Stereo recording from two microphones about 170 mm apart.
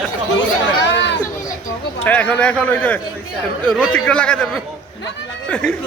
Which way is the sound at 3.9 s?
5° left (ahead or behind).